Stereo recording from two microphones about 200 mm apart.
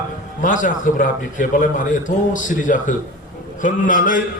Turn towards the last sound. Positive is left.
turn(degrees=40)  # may be behind; listen again after turning